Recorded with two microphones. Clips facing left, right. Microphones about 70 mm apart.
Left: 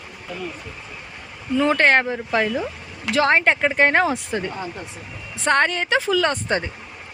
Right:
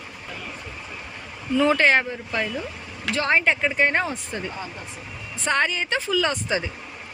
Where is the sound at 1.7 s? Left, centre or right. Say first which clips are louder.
Left 2 dB; left.